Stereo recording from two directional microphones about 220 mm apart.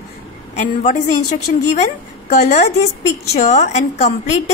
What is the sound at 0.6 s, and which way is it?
A woman's voice, 35° left (ahead or behind).